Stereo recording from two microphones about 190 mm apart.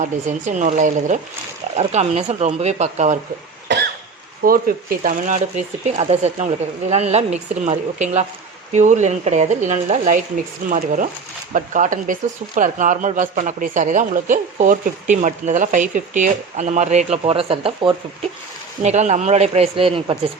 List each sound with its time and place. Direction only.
0.0 s speech: 40° right (ahead or behind)
4.4 s speech: 50° right (ahead or behind); by 18.3 s 25° right (ahead or behind)
18.8 s speech: 35° right (ahead or behind)